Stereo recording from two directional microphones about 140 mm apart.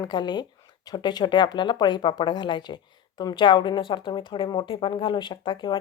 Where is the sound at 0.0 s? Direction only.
30° left (ahead or behind).